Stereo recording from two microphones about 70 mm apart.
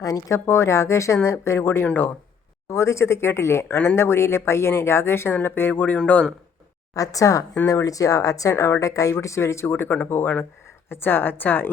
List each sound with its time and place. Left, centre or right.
0.0 s a woman's voice: left
2.6 s speech: left
6.9 s a woman's voice: left